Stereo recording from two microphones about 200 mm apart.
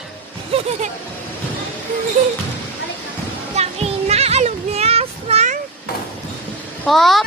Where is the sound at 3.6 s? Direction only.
30° right (ahead or behind).